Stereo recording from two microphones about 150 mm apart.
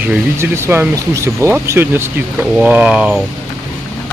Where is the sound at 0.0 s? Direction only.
15° right (ahead or behind).